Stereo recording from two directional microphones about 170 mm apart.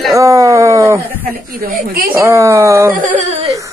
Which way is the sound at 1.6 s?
60° right (ahead or behind).